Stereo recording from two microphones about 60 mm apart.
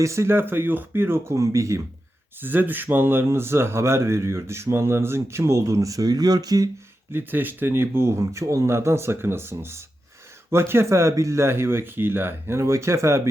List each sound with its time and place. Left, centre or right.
0.0 s speech: right
0.3 s speech: right
2.4 s speech: right
7.1 s speech: right
8.2 s speech: right